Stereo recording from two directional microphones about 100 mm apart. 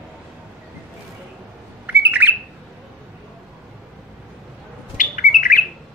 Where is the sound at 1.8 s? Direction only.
15° right (ahead or behind).